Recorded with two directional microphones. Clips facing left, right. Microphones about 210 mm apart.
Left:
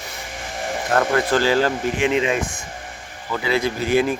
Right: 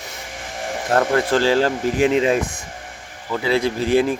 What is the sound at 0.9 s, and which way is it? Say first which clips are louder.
Speech: right 1 dB; 30° right (ahead or behind).